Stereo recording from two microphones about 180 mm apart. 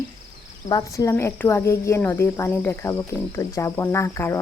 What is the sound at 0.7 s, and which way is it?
Speech, 20° left (ahead or behind).